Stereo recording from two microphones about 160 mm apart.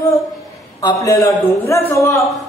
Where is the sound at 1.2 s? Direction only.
15° left (ahead or behind).